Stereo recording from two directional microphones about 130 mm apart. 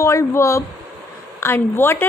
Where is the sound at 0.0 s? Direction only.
20° left (ahead or behind).